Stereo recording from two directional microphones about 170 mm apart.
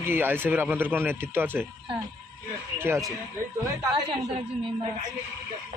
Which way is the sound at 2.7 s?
15° right (ahead or behind).